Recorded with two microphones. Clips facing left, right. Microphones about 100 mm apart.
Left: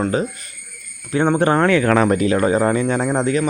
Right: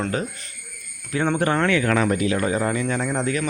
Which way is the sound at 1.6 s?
40° left (ahead or behind).